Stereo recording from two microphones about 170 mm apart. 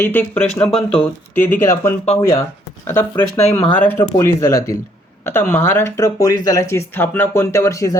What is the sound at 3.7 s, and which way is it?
Speech, 10° left (ahead or behind).